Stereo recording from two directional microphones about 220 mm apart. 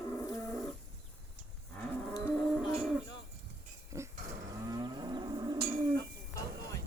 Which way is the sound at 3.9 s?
15° right (ahead or behind).